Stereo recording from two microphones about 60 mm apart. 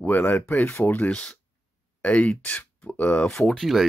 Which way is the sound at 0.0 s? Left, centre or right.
Left.